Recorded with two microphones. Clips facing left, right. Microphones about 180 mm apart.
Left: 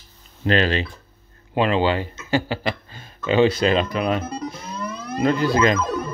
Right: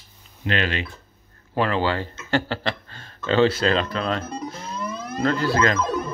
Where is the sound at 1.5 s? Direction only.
20° left (ahead or behind).